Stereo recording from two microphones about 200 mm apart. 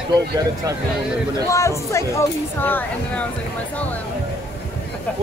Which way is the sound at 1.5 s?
15° left (ahead or behind).